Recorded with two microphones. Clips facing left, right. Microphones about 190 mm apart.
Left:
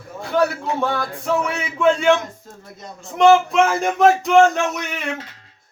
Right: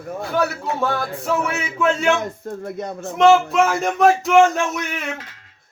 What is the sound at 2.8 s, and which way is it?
Speech, 60° right (ahead or behind).